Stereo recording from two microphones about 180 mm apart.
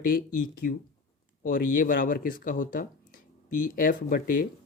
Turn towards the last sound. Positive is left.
turn(degrees=50)  # may be behind; listen again after turning